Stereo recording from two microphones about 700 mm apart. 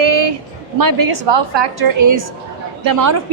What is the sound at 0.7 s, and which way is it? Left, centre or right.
A woman's voice, right.